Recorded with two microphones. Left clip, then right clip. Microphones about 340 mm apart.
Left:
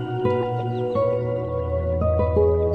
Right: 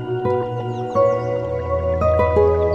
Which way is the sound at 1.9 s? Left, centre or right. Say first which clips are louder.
Right 7 dB; right.